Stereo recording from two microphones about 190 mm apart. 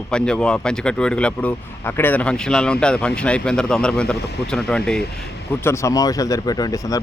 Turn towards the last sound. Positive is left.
turn(degrees=20)  # may be behind; listen again after turning